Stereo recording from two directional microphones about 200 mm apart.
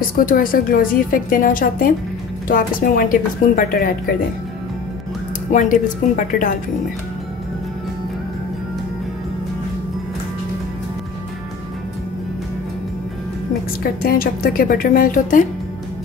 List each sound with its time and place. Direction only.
0.0 s a woman's voice: 45° left (ahead or behind)
5.5 s speech: 40° left (ahead or behind)
14.0 s a woman's voice: 45° left (ahead or behind)